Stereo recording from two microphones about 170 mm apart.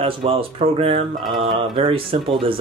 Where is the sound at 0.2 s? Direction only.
35° right (ahead or behind).